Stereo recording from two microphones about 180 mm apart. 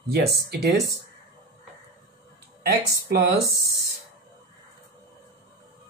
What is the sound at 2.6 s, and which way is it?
Speech, 60° right (ahead or behind).